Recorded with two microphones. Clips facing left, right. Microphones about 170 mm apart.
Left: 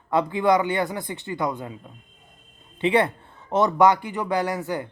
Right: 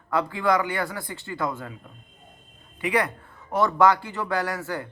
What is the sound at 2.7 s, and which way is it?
A man's voice, 25° left (ahead or behind).